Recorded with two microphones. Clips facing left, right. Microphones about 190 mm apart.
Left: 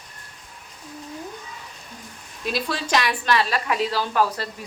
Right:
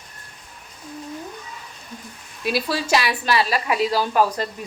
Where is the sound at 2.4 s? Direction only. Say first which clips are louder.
Right 3 dB; 10° right (ahead or behind).